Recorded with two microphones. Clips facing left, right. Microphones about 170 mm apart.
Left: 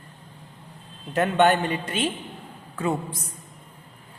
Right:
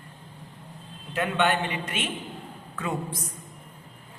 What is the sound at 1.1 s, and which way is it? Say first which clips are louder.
A man's voice: left 5 dB; 45° left (ahead or behind).